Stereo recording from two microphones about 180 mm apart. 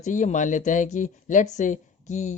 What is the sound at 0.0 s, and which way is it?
Speech, 45° left (ahead or behind).